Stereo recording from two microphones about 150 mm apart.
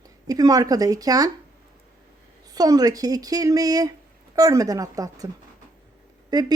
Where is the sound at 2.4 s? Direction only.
25° right (ahead or behind).